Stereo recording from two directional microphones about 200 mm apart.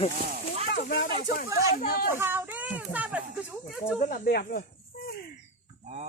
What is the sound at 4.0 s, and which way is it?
Speech, 45° left (ahead or behind).